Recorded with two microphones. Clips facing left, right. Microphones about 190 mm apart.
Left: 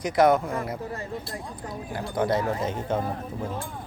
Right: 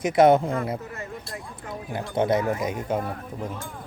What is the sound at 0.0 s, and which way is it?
Speech, 25° right (ahead or behind).